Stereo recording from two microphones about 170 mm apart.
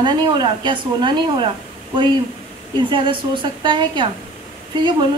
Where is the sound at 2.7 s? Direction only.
30° right (ahead or behind).